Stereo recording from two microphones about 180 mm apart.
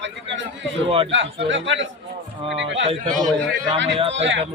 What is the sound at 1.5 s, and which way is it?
Speech, 90° right.